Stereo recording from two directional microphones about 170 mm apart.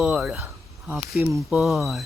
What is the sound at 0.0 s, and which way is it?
Speech, 5° right (ahead or behind).